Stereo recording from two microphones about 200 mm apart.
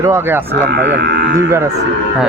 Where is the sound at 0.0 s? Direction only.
15° right (ahead or behind).